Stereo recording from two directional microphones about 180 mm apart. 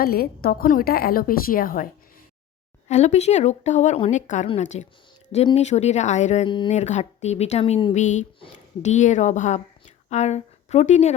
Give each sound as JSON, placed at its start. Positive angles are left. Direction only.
{"t": 0.0, "sound": "a woman's voice", "side_deg": 60}
{"t": 2.9, "sound": "a woman's voice", "side_deg": 40}
{"t": 7.9, "sound": "a woman's voice", "side_deg": 40}